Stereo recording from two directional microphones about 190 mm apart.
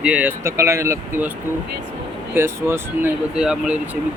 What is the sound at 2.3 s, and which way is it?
Speech, 10° right (ahead or behind).